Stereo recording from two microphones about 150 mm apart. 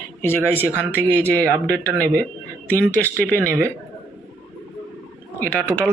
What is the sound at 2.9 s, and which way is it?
Speech, 10° left (ahead or behind).